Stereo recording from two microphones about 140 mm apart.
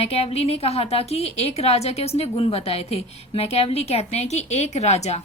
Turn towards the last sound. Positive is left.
turn(degrees=50)  # may be behind; listen again after turning